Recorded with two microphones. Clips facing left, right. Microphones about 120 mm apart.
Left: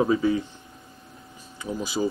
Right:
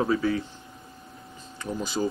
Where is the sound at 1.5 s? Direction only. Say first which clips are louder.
Left 1 dB; 5° left (ahead or behind).